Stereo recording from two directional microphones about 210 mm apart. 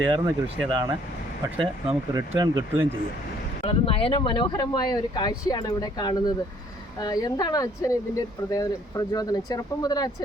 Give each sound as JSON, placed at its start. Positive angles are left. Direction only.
{"t": 0.1, "sound": "speech", "side_deg": -25}
{"t": 3.6, "sound": "speech", "side_deg": 25}